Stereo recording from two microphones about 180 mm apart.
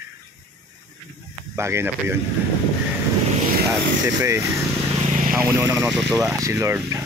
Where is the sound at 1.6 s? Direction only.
15° right (ahead or behind).